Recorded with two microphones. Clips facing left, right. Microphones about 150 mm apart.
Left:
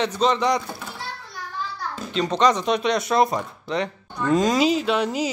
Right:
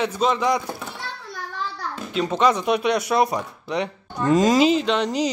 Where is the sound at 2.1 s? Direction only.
10° right (ahead or behind).